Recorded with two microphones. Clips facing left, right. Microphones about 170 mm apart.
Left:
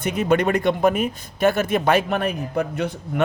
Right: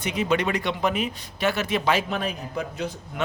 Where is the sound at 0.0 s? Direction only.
50° left (ahead or behind).